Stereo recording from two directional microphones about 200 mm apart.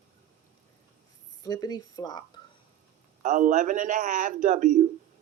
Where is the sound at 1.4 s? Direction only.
20° left (ahead or behind).